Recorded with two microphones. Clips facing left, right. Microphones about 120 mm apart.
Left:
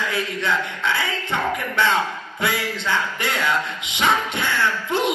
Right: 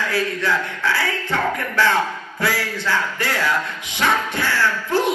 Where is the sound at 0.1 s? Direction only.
20° left (ahead or behind).